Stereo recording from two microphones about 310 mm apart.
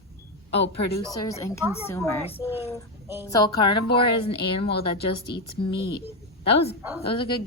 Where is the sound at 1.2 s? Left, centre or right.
Centre.